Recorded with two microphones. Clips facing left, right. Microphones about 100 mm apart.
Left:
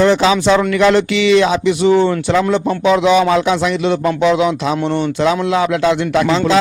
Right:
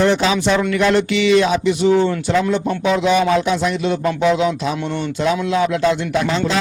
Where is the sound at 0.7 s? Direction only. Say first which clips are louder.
Left 3 dB; 90° left.